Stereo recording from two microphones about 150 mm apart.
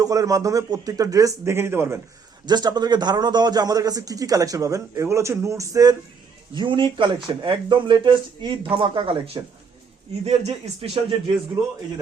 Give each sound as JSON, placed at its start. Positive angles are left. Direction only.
{"t": 0.0, "sound": "a man's voice", "side_deg": -25}
{"t": 2.5, "sound": "a man's voice", "side_deg": -30}